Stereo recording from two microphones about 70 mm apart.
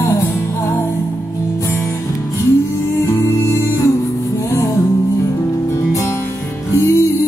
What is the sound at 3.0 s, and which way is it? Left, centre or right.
Music, left.